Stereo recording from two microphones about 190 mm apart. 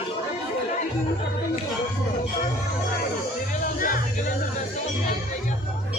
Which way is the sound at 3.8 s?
45° left (ahead or behind).